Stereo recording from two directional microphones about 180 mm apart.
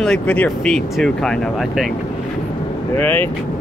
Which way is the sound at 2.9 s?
10° left (ahead or behind).